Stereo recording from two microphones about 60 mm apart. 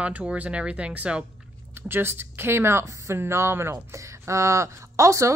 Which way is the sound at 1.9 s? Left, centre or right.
Right.